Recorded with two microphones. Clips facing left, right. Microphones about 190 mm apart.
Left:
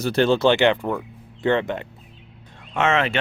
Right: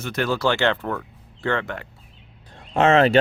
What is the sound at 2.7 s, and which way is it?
Speech, 35° right (ahead or behind).